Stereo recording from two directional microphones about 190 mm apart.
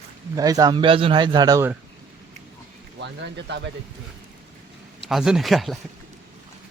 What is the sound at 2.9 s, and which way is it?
Speech, 65° right (ahead or behind).